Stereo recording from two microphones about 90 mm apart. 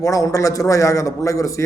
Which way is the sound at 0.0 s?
35° left (ahead or behind).